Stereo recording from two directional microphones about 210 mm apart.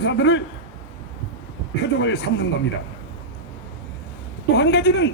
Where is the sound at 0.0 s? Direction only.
60° left (ahead or behind).